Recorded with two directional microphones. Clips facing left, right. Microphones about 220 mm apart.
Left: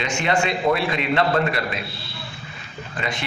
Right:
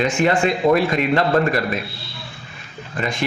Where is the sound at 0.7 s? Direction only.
45° right (ahead or behind).